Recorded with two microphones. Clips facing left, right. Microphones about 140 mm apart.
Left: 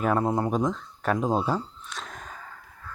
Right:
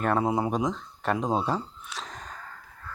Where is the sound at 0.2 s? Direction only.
10° right (ahead or behind).